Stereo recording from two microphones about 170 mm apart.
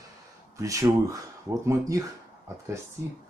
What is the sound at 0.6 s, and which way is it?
Speech, 20° right (ahead or behind).